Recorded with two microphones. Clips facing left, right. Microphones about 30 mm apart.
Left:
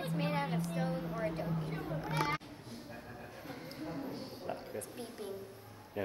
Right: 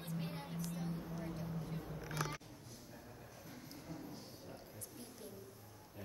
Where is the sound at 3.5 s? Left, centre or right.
Left.